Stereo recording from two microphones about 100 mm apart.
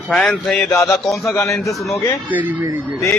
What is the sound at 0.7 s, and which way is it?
A man's voice, 25° left (ahead or behind).